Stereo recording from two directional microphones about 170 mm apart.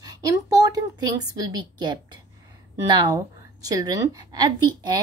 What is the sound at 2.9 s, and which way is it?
Speech, 25° right (ahead or behind).